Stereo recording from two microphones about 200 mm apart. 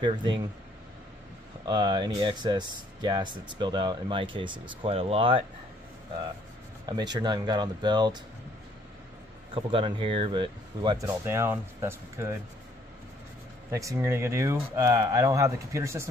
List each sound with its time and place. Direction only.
0.0 s speech: 25° right (ahead or behind)
1.7 s speech: 20° right (ahead or behind)
6.9 s speech: 20° right (ahead or behind)
9.5 s speech: 25° right (ahead or behind)
13.7 s speech: 15° right (ahead or behind)